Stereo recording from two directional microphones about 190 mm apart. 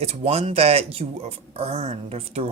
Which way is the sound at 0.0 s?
35° right (ahead or behind).